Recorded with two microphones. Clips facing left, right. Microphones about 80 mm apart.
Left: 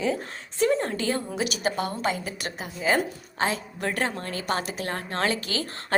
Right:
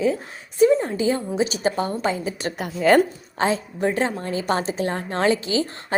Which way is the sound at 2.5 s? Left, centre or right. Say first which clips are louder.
Right 8 dB; right.